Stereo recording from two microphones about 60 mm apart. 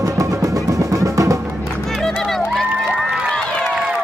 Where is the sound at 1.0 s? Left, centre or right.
Right.